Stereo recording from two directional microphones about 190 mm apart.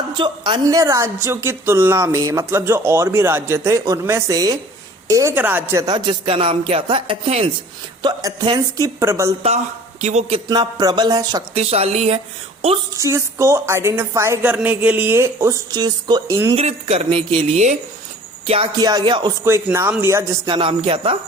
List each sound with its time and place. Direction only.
0.2 s a woman's voice: 25° right (ahead or behind)
10.0 s speech: 35° right (ahead or behind)
10.5 s speech: 20° right (ahead or behind)
11.5 s speech: 35° right (ahead or behind)
13.0 s a woman's voice: 15° right (ahead or behind)
16.6 s a woman's voice: 35° right (ahead or behind)